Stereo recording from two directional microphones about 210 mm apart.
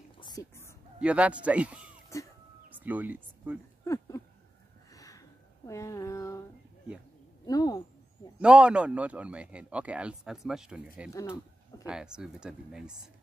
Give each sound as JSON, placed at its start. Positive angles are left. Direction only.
{"t": 0.2, "sound": "a sound", "side_deg": 15}
{"t": 1.0, "sound": "a man's voice", "side_deg": -5}
{"t": 3.8, "sound": "a sound", "side_deg": 15}
{"t": 7.4, "sound": "speech", "side_deg": 15}
{"t": 8.4, "sound": "a man's voice", "side_deg": -5}
{"t": 11.1, "sound": "speech", "side_deg": 15}
{"t": 11.8, "sound": "a man's voice", "side_deg": -5}